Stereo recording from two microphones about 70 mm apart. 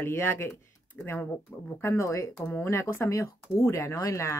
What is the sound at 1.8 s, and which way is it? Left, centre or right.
Speech, left.